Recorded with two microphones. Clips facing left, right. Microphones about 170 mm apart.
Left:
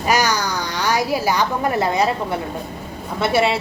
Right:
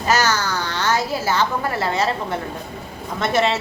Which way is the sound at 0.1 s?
15° left (ahead or behind).